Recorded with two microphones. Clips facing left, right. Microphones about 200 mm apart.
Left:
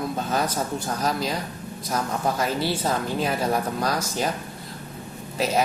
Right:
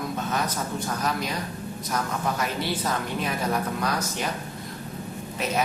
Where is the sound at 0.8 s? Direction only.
30° left (ahead or behind).